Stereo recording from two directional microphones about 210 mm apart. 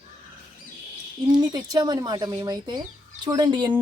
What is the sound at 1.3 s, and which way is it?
Speech, 20° right (ahead or behind).